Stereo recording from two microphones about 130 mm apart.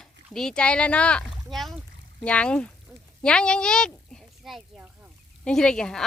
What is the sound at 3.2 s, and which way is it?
A woman's voice, 5° left (ahead or behind).